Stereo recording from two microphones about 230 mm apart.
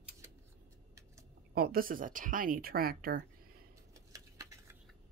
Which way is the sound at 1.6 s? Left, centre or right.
Right.